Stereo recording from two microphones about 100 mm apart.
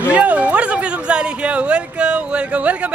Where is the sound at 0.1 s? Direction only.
10° right (ahead or behind).